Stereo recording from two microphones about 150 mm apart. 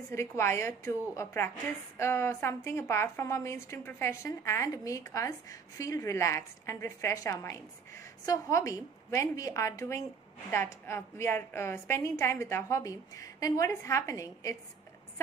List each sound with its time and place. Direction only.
0.1 s a woman's voice: 15° left (ahead or behind)